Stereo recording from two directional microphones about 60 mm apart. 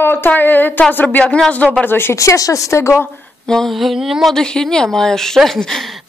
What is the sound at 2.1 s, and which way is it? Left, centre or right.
Speech, left.